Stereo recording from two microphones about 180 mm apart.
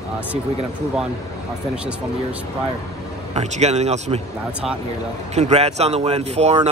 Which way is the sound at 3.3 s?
40° right (ahead or behind).